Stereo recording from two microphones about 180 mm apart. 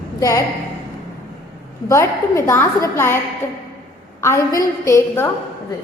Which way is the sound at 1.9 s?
15° left (ahead or behind).